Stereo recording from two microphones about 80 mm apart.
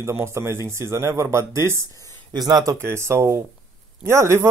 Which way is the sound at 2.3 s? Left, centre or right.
Right.